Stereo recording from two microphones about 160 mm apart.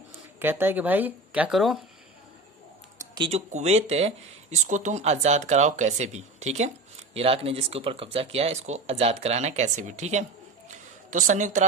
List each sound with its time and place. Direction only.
0.3 s speech: 15° right (ahead or behind)
3.2 s speech: 45° right (ahead or behind)
10.7 s a sound: 50° right (ahead or behind)